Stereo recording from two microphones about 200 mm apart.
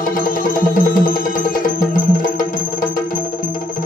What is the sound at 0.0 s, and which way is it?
Music, 45° left (ahead or behind).